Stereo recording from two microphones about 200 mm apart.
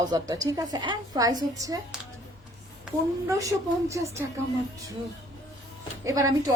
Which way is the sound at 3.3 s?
15° right (ahead or behind).